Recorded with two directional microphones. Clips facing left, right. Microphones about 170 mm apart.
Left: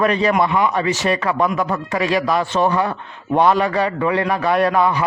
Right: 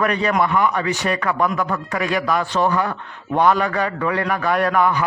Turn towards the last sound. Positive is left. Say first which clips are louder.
# left 2 dB
turn(degrees=25)  # may be behind; listen again after turning